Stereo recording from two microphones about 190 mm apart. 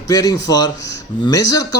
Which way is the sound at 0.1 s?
20° left (ahead or behind).